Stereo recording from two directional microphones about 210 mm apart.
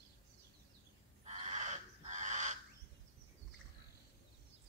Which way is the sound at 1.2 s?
30° right (ahead or behind).